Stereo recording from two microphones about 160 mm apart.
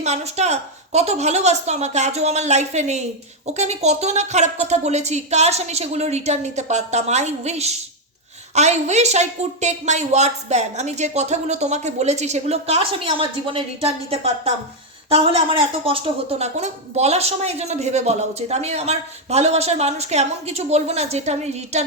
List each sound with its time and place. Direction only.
0.0 s speech: 45° right (ahead or behind)